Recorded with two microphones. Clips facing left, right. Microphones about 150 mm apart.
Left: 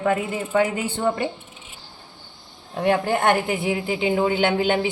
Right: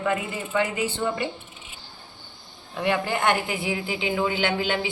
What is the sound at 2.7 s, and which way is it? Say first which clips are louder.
A woman's voice: left 4 dB; 40° left (ahead or behind).